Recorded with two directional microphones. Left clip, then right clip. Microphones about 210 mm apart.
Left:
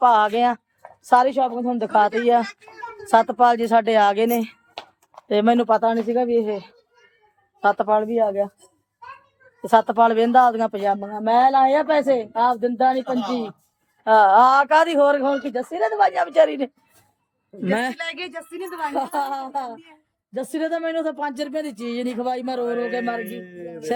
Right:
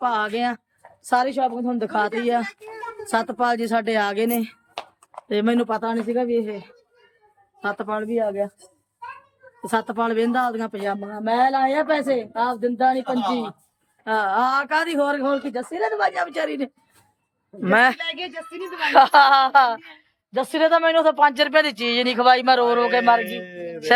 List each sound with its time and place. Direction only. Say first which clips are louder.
0.0 s a woman's voice: left 6 dB; 20° left (ahead or behind)
9.6 s speech: left 7 dB; 20° left (ahead or behind)
13.1 s speech: right 2 dB; 10° right (ahead or behind)
14.0 s speech: left 8 dB; 20° left (ahead or behind)
17.6 s speech: right 7 dB; centre (ahead or behind)
18.1 s a woman's voice: right 1 dB; 20° left (ahead or behind)
20.3 s speech: right 7 dB; centre (ahead or behind)